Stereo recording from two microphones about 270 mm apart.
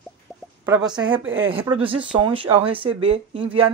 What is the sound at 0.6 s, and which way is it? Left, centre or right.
Speech, centre.